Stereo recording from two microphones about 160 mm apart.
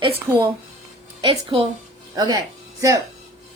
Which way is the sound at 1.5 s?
30° right (ahead or behind).